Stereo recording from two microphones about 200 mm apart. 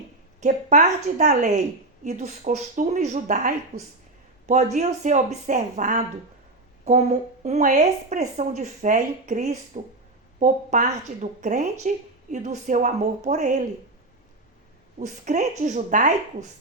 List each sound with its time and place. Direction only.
0.3 s speech: 35° right (ahead or behind)
14.9 s speech: 35° right (ahead or behind)